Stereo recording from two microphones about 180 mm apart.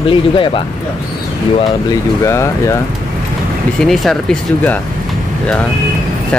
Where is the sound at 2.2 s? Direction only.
15° left (ahead or behind).